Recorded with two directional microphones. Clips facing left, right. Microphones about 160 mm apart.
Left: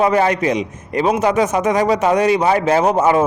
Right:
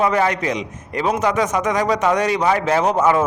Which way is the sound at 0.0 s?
30° left (ahead or behind).